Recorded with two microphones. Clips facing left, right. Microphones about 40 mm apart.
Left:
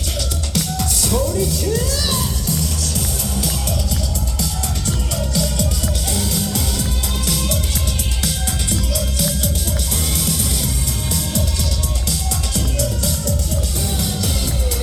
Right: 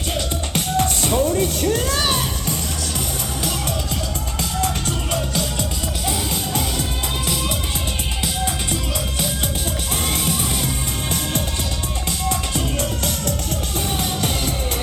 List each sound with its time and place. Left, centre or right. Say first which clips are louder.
0.5 s music: right 3 dB; right
5.1 s music: left 2 dB; right
7.3 s music: left 3 dB; centre
8.7 s music: left 1 dB; right
12.5 s music: even; right